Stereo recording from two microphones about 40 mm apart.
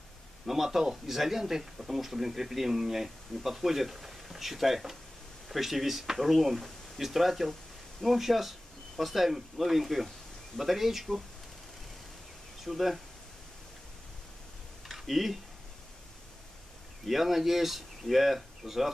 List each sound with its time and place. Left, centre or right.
0.5 s speech: centre
12.6 s speech: centre
14.9 s a sound: centre
17.0 s speech: centre